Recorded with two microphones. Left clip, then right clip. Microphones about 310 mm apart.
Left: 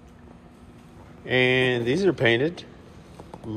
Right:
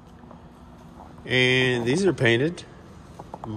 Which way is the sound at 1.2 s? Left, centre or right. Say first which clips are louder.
Even; centre.